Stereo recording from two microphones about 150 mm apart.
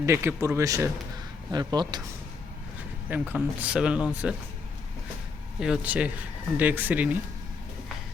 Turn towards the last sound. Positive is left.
turn(degrees=-10)  # may be behind; listen again after turning